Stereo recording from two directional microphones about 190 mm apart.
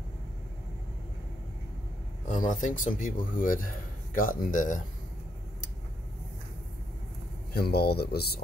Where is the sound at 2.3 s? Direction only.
45° left (ahead or behind).